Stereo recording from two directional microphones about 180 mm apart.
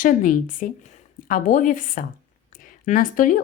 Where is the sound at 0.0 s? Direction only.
50° left (ahead or behind).